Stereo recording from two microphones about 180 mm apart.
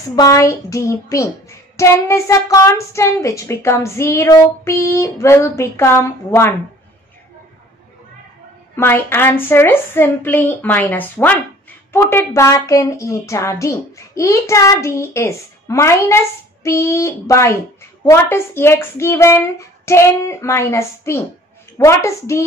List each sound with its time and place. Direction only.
0.1 s speech: 20° left (ahead or behind)
8.7 s speech: 10° left (ahead or behind)